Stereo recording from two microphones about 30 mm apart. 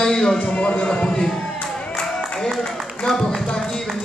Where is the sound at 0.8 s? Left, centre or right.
Left.